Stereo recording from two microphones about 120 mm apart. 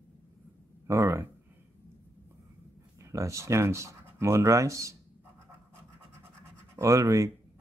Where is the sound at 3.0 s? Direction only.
25° right (ahead or behind).